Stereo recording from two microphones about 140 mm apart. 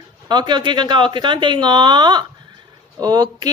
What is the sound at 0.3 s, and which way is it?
A woman's voice, 30° right (ahead or behind).